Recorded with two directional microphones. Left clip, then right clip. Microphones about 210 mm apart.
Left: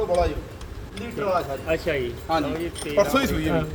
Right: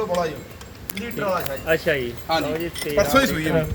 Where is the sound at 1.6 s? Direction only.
35° right (ahead or behind).